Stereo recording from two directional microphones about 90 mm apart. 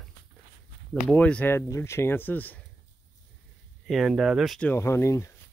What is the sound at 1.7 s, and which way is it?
Speech, 30° left (ahead or behind).